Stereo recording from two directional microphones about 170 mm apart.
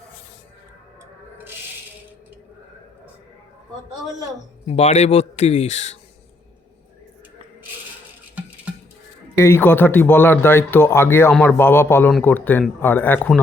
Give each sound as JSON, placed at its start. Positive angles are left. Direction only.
{"t": 3.9, "sound": "a man's voice", "side_deg": 0}
{"t": 4.6, "sound": "a man's voice", "side_deg": 40}
{"t": 9.3, "sound": "speech", "side_deg": 15}